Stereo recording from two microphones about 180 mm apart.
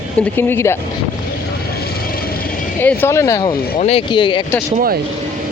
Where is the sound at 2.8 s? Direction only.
15° left (ahead or behind).